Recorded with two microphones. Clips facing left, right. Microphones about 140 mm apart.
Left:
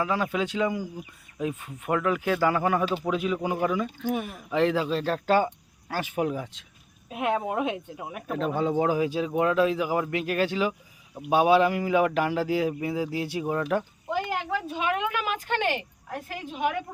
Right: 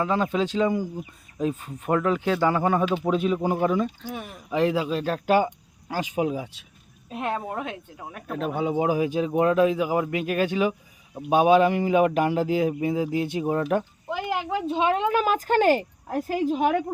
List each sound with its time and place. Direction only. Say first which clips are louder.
0.0 s a man's voice: right 3 dB; 25° right (ahead or behind)
3.0 s speech: right 4 dB; 30° right (ahead or behind)
4.4 s speech: right 1 dB; 10° right (ahead or behind)
7.1 s speech: left 2 dB; 5° left (ahead or behind)
8.3 s a man's voice: even; 5° right (ahead or behind); by 16.8 s 35° right (ahead or behind)